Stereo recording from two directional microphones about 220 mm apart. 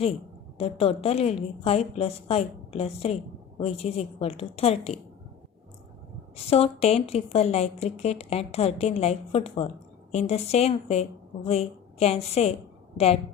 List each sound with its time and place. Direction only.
0.6 s speech: 25° left (ahead or behind)
6.3 s a woman's voice: 25° left (ahead or behind)